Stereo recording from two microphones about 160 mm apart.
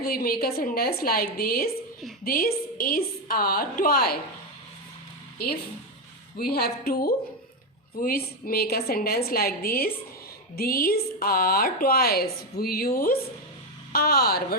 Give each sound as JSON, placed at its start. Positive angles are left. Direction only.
{"t": 0.0, "sound": "a woman's voice", "side_deg": 70}
{"t": 6.3, "sound": "a woman's voice", "side_deg": 70}